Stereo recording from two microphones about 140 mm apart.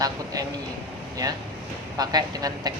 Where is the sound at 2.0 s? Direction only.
25° right (ahead or behind).